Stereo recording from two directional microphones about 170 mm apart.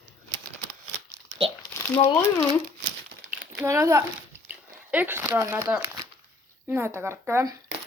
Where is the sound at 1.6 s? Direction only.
15° left (ahead or behind).